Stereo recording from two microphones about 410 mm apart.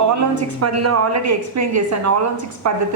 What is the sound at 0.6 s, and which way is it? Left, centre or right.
A woman's voice, right.